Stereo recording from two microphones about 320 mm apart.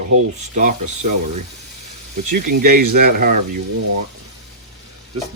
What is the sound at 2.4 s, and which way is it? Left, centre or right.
Speech, right.